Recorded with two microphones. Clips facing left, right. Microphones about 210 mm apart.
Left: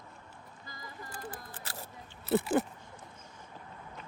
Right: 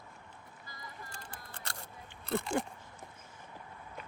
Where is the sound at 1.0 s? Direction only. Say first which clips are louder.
Left 6 dB; 5° left (ahead or behind).